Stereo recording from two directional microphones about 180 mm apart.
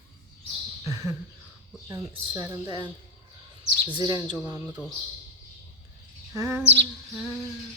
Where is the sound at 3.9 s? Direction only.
25° right (ahead or behind).